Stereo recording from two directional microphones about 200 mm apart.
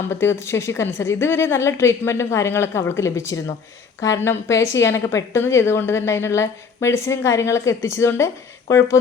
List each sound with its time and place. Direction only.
0.1 s speech: 10° left (ahead or behind)